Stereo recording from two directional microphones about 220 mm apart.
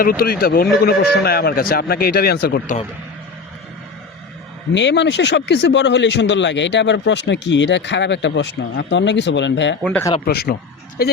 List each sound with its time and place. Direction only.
0.0 s a man's voice: 40° left (ahead or behind)
4.7 s a man's voice: 55° left (ahead or behind)
9.8 s speech: 5° left (ahead or behind)
10.2 s a man's voice: 45° left (ahead or behind)